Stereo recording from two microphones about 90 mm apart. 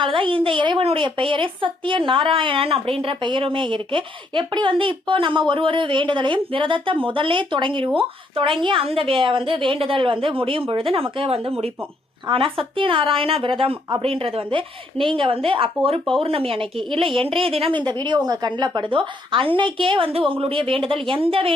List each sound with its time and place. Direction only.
0.0 s a woman's voice: 70° right (ahead or behind)
7.9 s a woman's voice: 80° right
12.3 s a woman's voice: 70° right (ahead or behind)
14.0 s a woman's voice: 90° right; by 15.4 s 75° right (ahead or behind)
15.4 s a woman's voice: 85° right
17.8 s a woman's voice: 60° right (ahead or behind); by 21.5 s 90° right